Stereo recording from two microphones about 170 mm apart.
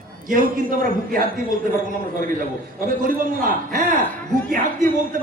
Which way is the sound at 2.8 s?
55° right (ahead or behind).